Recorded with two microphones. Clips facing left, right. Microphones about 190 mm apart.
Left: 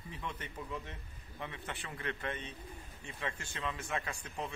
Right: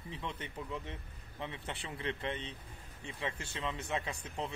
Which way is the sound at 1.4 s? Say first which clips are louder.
Right 1 dB; 25° right (ahead or behind).